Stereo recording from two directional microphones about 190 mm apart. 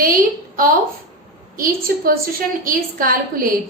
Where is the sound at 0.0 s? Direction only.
50° right (ahead or behind).